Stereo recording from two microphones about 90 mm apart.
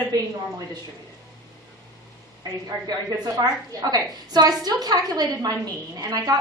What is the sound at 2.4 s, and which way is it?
A woman's voice, 40° right (ahead or behind).